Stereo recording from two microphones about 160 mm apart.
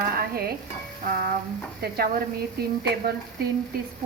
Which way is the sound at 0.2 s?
75° right (ahead or behind).